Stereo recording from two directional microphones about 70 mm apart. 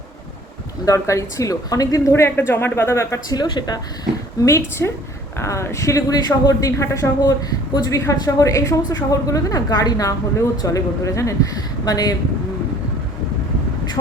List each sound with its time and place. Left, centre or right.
0.9 s speech: left
2.1 s speech: left
3.2 s speech: left
4.4 s speech: left
7.2 s a woman's voice: left